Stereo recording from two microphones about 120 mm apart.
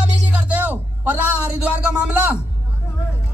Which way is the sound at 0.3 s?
10° right (ahead or behind).